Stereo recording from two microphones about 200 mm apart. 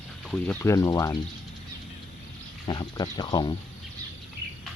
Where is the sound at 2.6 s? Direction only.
20° left (ahead or behind).